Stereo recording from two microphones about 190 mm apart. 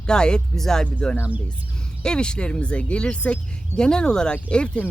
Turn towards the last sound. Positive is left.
turn(degrees=5)  # may be behind; listen again after turning